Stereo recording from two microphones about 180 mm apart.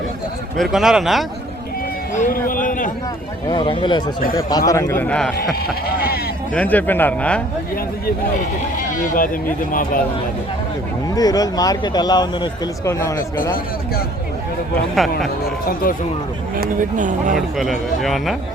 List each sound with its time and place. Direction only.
0.5 s a man's voice: centre (ahead or behind)
2.1 s a sound: 45° left (ahead or behind)
3.5 s a man's voice: 25° left (ahead or behind); by 5.5 s 5° left (ahead or behind)
5.6 s speech: 55° left (ahead or behind)
6.5 s a man's voice: 10° left (ahead or behind)
8.9 s speech: 50° left (ahead or behind)
11.1 s speech: 20° left (ahead or behind)
15.6 s speech: 50° left (ahead or behind)
16.6 s speech: 45° right (ahead or behind)
17.3 s a man's voice: centre (ahead or behind)